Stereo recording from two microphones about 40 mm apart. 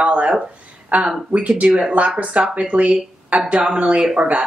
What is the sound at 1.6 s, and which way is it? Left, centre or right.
Speech, right.